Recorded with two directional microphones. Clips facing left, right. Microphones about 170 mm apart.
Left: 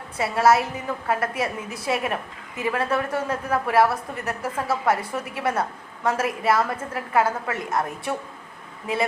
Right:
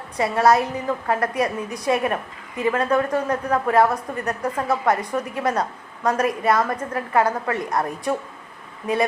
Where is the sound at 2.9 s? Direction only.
15° right (ahead or behind).